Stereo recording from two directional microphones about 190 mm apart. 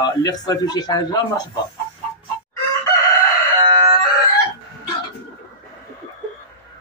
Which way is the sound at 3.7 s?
20° right (ahead or behind).